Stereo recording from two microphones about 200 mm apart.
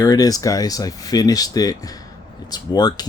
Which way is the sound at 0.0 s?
20° left (ahead or behind).